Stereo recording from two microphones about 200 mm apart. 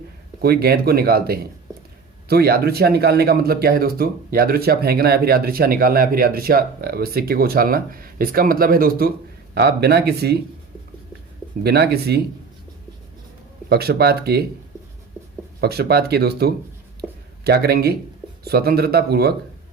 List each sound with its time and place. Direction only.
0.4 s speech: 50° right (ahead or behind)
11.6 s speech: 55° right (ahead or behind)
13.7 s speech: 50° right (ahead or behind)
15.6 s speech: 50° right (ahead or behind)